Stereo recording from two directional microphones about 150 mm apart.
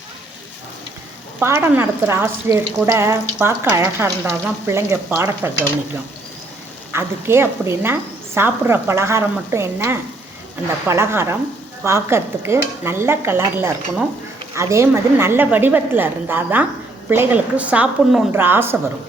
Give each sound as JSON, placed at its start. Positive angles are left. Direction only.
{"t": 1.4, "sound": "a woman's voice", "side_deg": -15}
{"t": 6.9, "sound": "a woman's voice", "side_deg": -15}